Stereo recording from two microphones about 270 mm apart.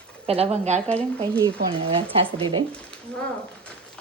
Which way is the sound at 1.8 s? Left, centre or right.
Centre.